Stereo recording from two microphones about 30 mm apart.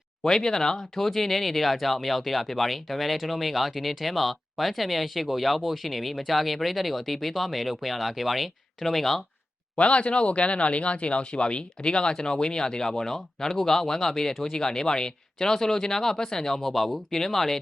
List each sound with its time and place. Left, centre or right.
0.3 s speech: centre
0.8 s speech: centre
9.7 s speech: left; by 17.6 s centre